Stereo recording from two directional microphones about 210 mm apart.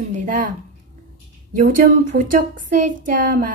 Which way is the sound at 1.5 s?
40° right (ahead or behind).